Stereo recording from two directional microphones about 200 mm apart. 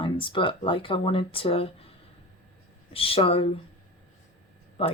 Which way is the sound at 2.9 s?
30° left (ahead or behind).